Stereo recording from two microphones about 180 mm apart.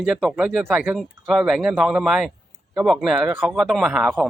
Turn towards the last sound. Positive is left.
turn(degrees=0)  # may be behind; listen again after turning